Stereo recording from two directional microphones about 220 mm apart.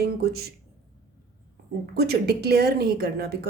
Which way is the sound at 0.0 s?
45° right (ahead or behind).